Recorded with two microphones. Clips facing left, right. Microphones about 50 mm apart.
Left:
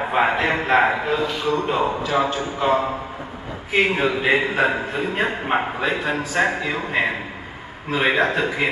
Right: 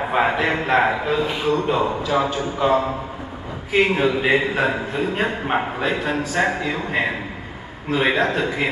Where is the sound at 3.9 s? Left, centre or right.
Centre.